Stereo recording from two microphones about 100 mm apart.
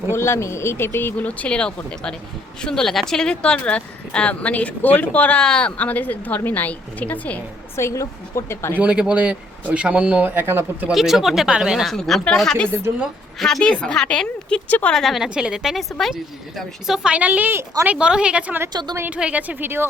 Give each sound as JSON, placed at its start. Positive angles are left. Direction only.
{"t": 0.1, "sound": "speech", "side_deg": 25}
{"t": 7.8, "sound": "speech", "side_deg": 30}
{"t": 8.8, "sound": "speech", "side_deg": -10}
{"t": 10.9, "sound": "speech", "side_deg": -5}
{"t": 14.9, "sound": "speech", "side_deg": 0}
{"t": 17.8, "sound": "speech", "side_deg": -10}
{"t": 18.7, "sound": "a woman's voice", "side_deg": -45}
{"t": 18.9, "sound": "a woman's voice", "side_deg": -20}